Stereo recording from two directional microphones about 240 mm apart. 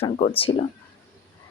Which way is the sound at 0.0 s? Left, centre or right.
Left.